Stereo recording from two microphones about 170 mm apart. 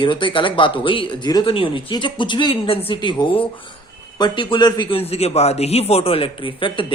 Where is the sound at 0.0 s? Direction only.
30° left (ahead or behind).